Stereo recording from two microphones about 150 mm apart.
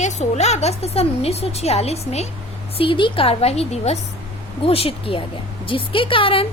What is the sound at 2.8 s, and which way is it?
A woman's voice, 35° left (ahead or behind).